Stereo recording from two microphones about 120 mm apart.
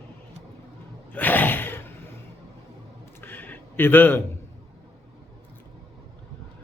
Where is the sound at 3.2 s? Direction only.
15° left (ahead or behind).